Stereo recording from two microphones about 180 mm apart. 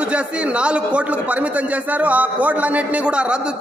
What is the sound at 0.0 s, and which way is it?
A man's voice, 5° right (ahead or behind).